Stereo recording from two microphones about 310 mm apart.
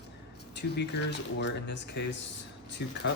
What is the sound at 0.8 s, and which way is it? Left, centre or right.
Speech, left.